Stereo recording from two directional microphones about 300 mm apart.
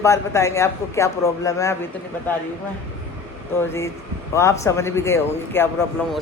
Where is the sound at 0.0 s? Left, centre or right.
Centre.